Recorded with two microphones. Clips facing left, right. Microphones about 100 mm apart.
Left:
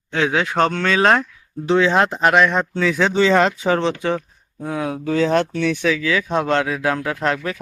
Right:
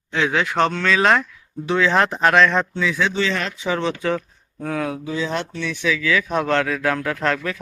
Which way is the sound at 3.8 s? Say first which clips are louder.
Left 2 dB; 25° left (ahead or behind).